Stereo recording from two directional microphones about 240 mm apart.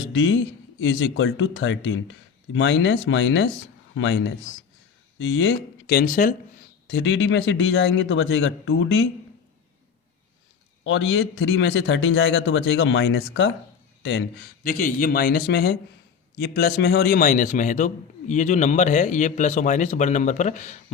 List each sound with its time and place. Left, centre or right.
0.0 s speech: left
5.2 s speech: left
6.8 s speech: left
10.8 s speech: left
14.6 s a man's voice: left